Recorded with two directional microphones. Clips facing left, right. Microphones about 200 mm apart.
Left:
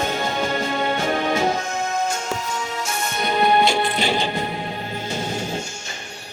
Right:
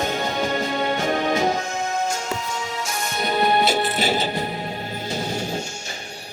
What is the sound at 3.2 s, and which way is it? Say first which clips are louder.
Music: left 2 dB; 40° right (ahead or behind).